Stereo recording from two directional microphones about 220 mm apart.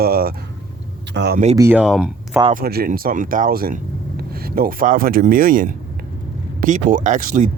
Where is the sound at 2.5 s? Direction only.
40° right (ahead or behind).